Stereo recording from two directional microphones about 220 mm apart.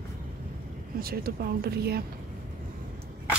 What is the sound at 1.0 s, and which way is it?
Speech, 45° right (ahead or behind).